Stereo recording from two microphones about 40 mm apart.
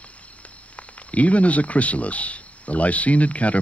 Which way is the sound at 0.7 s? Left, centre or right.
Left.